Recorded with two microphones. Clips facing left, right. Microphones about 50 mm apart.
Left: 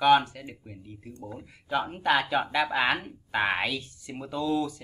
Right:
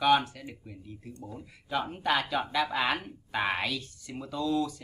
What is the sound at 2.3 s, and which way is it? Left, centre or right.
A woman's voice, left.